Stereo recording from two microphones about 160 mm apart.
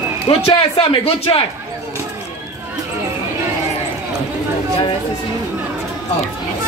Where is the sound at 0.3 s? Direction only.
35° left (ahead or behind).